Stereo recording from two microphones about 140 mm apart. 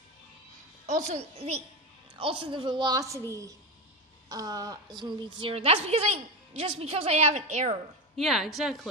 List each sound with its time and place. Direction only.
0.8 s a woman's voice: 50° right (ahead or behind)
2.1 s a woman's voice: 40° right (ahead or behind)
8.2 s a woman's voice: centre (ahead or behind)